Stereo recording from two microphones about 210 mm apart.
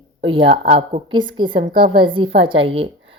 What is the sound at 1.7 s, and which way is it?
Speech, 50° right (ahead or behind).